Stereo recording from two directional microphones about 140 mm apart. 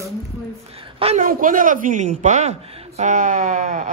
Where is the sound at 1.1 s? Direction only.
70° right (ahead or behind).